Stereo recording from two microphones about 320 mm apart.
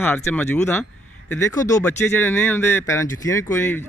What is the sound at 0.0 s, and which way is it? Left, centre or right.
A man's voice, centre.